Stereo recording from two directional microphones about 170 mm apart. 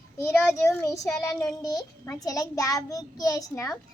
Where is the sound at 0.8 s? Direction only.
15° left (ahead or behind).